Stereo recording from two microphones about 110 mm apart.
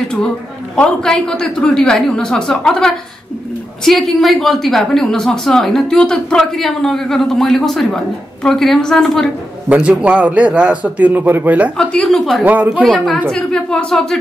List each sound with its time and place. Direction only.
0.7 s a woman's voice: 5° left (ahead or behind)
9.7 s a man's voice: 10° right (ahead or behind)
11.7 s a woman's voice: 10° left (ahead or behind)
12.4 s a man's voice: 15° right (ahead or behind)
13.3 s a woman's voice: 5° left (ahead or behind)